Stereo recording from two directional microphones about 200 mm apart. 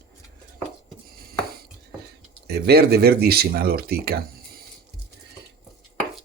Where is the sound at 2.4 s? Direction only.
55° right (ahead or behind).